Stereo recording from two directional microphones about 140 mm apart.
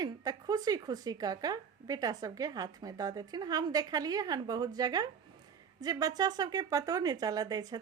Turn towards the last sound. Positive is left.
turn(degrees=-30)  # may be behind; listen again after turning